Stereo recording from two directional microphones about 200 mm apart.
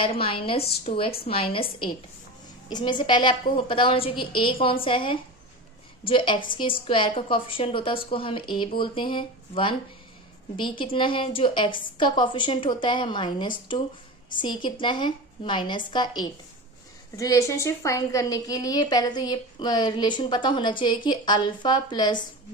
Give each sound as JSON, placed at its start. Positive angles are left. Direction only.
{"t": 0.0, "sound": "a woman's voice", "side_deg": 25}